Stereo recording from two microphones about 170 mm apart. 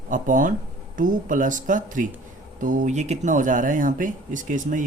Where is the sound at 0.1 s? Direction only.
50° right (ahead or behind).